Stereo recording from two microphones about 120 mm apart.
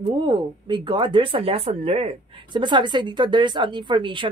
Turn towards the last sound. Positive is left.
turn(degrees=-45)  # may be behind; listen again after turning